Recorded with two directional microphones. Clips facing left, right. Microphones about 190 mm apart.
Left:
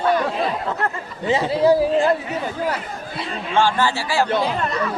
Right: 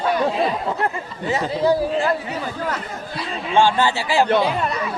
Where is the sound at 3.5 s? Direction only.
20° right (ahead or behind).